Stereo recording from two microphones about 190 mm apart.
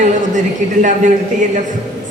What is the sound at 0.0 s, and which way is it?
Speech, 40° right (ahead or behind).